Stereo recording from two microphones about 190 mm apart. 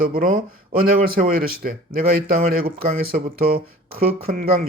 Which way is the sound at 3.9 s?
50° right (ahead or behind).